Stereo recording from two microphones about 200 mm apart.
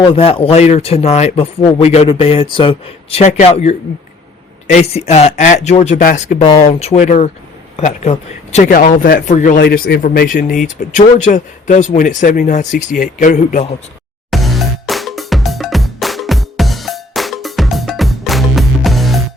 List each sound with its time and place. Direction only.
0.1 s a man's voice: 30° left (ahead or behind)
14.3 s music: centre (ahead or behind)